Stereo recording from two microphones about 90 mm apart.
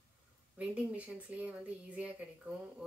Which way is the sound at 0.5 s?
15° right (ahead or behind).